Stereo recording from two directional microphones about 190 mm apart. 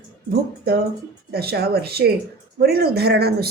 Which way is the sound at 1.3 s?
55° right (ahead or behind).